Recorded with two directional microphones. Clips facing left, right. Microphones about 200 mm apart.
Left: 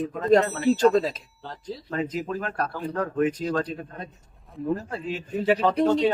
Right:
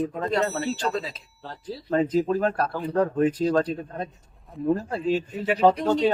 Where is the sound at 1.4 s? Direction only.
5° right (ahead or behind).